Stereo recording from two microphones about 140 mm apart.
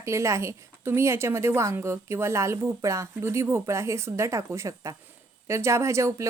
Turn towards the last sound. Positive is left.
turn(degrees=-20)  # may be behind; listen again after turning